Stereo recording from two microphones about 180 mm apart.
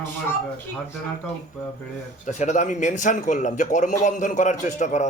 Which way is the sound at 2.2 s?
40° left (ahead or behind).